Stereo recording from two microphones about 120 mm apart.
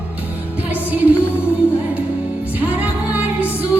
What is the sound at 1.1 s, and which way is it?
Music, 20° left (ahead or behind).